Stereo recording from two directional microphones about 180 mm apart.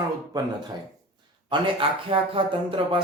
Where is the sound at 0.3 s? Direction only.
20° right (ahead or behind).